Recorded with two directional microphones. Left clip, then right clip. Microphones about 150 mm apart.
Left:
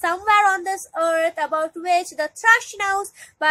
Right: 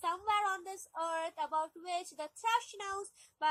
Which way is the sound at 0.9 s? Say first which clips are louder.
Left 17 dB; 50° left (ahead or behind).